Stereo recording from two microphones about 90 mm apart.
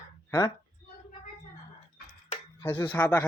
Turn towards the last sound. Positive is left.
turn(degrees=15)  # may be behind; listen again after turning